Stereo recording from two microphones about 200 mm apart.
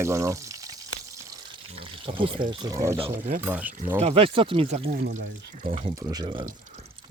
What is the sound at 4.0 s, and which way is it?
Speech, 30° right (ahead or behind).